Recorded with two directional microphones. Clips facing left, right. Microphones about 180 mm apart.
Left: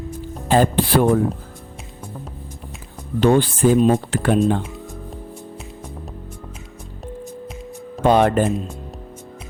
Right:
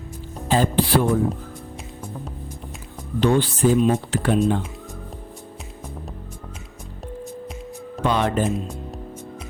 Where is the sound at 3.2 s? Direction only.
50° left (ahead or behind).